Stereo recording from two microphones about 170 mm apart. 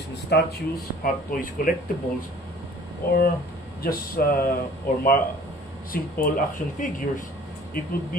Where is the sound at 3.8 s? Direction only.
60° left (ahead or behind).